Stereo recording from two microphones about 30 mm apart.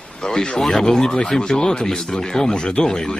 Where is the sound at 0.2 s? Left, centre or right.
Left.